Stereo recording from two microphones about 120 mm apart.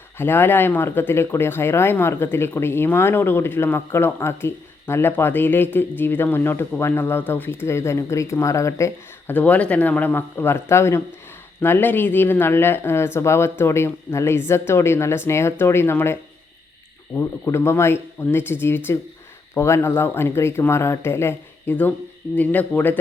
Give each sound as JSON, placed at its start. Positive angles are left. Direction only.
{"t": 0.2, "sound": "speech", "side_deg": 15}
{"t": 17.2, "sound": "speech", "side_deg": 20}